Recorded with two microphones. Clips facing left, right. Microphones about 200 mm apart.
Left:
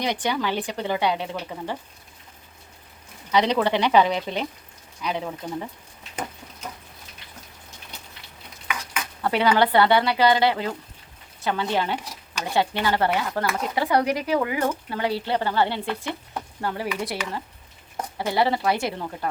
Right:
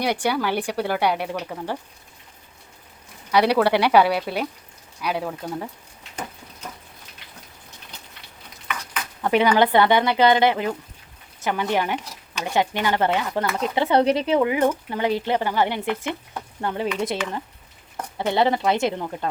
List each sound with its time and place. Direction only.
0.0 s speech: 10° right (ahead or behind)
3.3 s speech: 10° right (ahead or behind)
9.2 s speech: 15° right (ahead or behind)